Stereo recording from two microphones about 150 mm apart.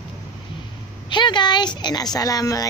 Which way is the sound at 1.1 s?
30° left (ahead or behind).